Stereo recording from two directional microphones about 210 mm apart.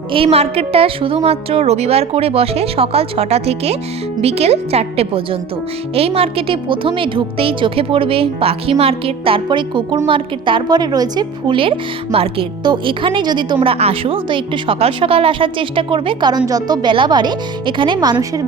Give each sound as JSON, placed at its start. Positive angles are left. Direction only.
{"t": 0.1, "sound": "a woman's voice", "side_deg": -25}